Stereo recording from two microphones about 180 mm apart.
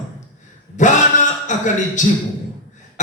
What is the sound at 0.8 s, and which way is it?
Speech, 45° left (ahead or behind).